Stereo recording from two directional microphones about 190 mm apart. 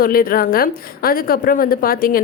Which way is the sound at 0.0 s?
50° left (ahead or behind).